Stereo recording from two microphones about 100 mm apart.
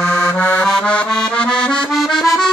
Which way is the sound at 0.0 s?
15° left (ahead or behind).